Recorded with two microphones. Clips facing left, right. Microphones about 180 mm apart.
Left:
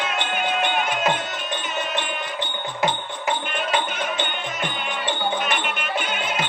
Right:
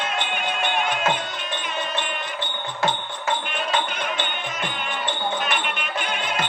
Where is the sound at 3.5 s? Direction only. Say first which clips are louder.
Left 1 dB; centre (ahead or behind).